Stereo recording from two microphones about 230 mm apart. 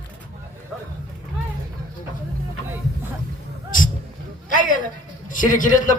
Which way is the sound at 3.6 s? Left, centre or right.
Left.